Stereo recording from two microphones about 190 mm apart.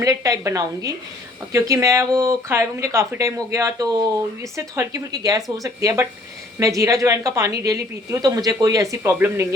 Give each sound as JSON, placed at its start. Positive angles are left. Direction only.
{"t": 0.0, "sound": "a woman's voice", "side_deg": -15}